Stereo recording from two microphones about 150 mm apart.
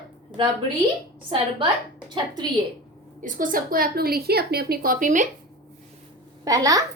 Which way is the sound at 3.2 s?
65° right (ahead or behind).